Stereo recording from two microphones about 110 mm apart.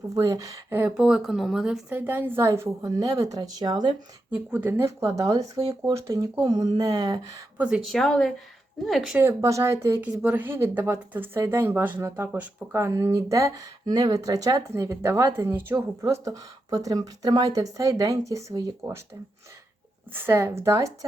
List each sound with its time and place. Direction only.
0.1 s speech: 30° right (ahead or behind)
0.9 s speech: 5° right (ahead or behind)
1.9 s speech: 20° right (ahead or behind); by 3.9 s 40° right (ahead or behind)
4.5 s speech: 20° right (ahead or behind)
6.4 s speech: 40° right (ahead or behind)
7.6 s speech: 10° right (ahead or behind)
7.9 s speech: 5° left (ahead or behind)
9.1 s speech: 25° right (ahead or behind)
20.1 s speech: 20° right (ahead or behind)